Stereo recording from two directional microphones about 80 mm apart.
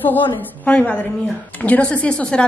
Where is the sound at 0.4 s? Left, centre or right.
Centre.